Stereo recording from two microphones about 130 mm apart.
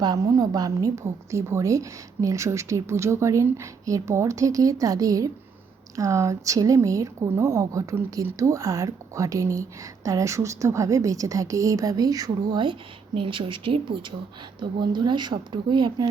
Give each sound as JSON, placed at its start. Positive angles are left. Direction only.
{"t": 0.0, "sound": "a woman's voice", "side_deg": -30}